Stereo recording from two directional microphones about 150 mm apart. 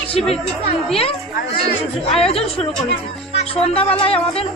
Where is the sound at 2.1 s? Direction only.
40° left (ahead or behind).